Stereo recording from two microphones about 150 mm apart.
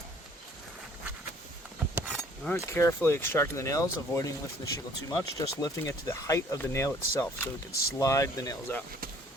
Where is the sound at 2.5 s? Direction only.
20° left (ahead or behind).